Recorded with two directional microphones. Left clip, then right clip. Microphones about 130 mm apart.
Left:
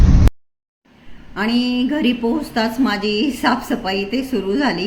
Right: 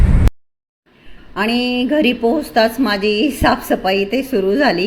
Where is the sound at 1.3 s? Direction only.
15° right (ahead or behind).